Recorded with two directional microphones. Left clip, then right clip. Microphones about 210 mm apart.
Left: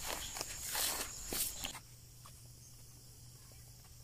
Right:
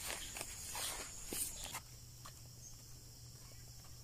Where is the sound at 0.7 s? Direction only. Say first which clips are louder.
Left 7 dB; 40° left (ahead or behind).